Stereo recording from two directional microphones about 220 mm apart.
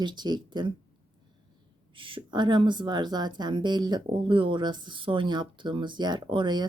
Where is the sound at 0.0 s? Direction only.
20° right (ahead or behind).